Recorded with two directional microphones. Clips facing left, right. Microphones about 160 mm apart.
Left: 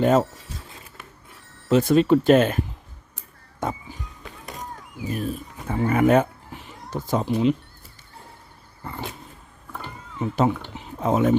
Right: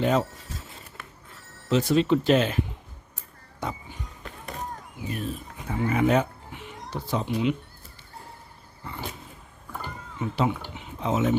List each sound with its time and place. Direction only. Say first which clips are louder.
0.0 s speech: left 5 dB; 45° left (ahead or behind)
1.7 s speech: left 4 dB; 50° left (ahead or behind)
3.6 s music: left 5 dB; 50° left (ahead or behind)
5.6 s speech: left 4 dB; 45° left (ahead or behind)
6.6 s a sound: left 3 dB; 40° left (ahead or behind)
10.2 s speech: left 4 dB; 45° left (ahead or behind)
10.8 s a sound: left 5 dB; 45° left (ahead or behind)